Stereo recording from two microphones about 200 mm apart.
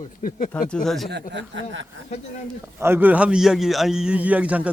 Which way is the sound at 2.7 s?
10° right (ahead or behind).